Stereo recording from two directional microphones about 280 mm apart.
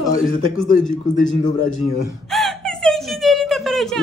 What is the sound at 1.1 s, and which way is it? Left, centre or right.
Speech, left.